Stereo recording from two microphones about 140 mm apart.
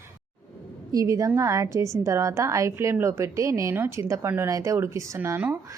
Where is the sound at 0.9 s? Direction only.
25° right (ahead or behind).